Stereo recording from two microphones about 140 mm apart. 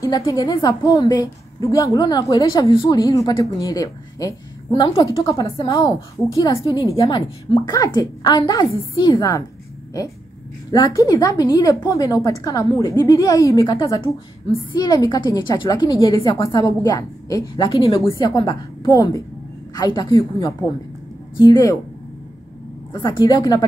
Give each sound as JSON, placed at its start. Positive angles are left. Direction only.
{"t": 0.0, "sound": "a woman's voice", "side_deg": 25}
{"t": 2.7, "sound": "a woman's voice", "side_deg": 40}
{"t": 3.0, "sound": "a woman's voice", "side_deg": 25}
{"t": 17.6, "sound": "a woman's voice", "side_deg": 35}
{"t": 22.9, "sound": "a woman's voice", "side_deg": 30}